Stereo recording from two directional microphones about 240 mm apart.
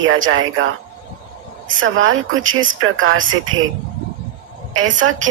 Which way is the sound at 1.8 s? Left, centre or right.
Right.